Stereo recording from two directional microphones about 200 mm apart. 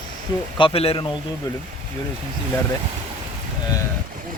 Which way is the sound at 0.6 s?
30° left (ahead or behind).